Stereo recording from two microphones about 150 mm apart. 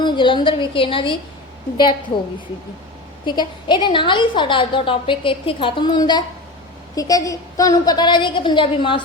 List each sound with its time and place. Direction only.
0.0 s a woman's voice: 30° left (ahead or behind)
3.2 s a woman's voice: 30° left (ahead or behind)